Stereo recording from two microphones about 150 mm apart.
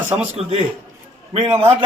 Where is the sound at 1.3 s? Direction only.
40° right (ahead or behind).